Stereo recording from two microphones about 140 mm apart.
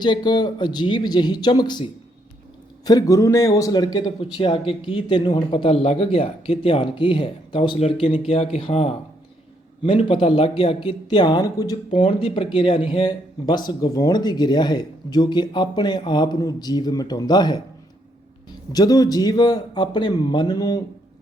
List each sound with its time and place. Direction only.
0.0 s speech: 30° left (ahead or behind)
18.7 s a man's voice: 25° left (ahead or behind)